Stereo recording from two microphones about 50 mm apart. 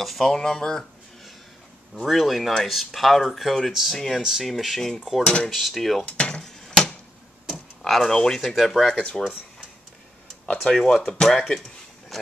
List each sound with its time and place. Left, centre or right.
0.0 s speech: centre
2.0 s speech: centre
5.2 s dishes: left
5.5 s speech: centre
6.0 s dishes: left
6.4 s hammer: centre
7.8 s speech: centre
9.2 s speech: centre
10.7 s speech: centre